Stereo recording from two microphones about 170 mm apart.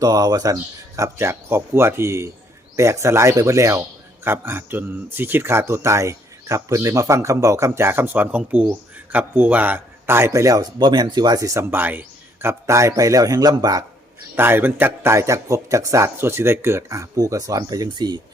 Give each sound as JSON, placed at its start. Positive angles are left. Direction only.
{"t": 0.0, "sound": "speech", "side_deg": -20}
{"t": 14.3, "sound": "speech", "side_deg": -10}